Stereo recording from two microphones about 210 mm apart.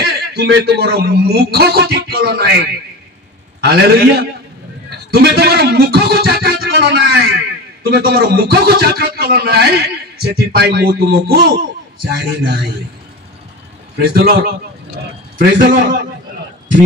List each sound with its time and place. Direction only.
0.0 s a man's voice: 50° right (ahead or behind)
13.9 s a man's voice: 45° right (ahead or behind)